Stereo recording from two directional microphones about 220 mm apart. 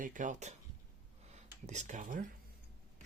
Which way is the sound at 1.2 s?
30° right (ahead or behind).